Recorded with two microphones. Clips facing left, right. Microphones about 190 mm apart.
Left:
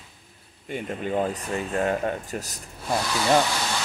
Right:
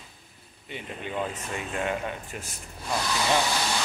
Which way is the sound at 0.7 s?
45° left (ahead or behind).